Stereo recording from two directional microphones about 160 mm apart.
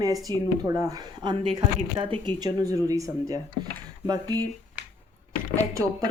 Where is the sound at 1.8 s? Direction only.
35° right (ahead or behind).